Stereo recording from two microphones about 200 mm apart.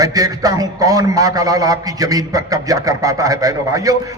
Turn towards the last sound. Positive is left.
turn(degrees=-15)  # may be behind; listen again after turning